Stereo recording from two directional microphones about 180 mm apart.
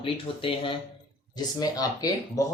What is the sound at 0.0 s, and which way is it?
Speech, 30° left (ahead or behind).